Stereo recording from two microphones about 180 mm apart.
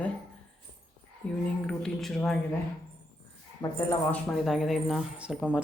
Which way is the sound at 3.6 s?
20° left (ahead or behind).